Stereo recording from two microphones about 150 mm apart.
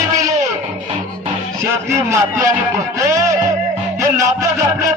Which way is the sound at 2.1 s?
20° right (ahead or behind).